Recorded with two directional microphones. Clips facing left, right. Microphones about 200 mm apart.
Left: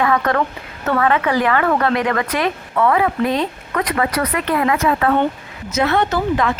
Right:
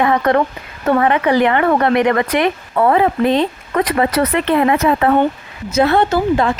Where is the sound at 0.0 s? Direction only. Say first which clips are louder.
Right 3 dB; 25° right (ahead or behind).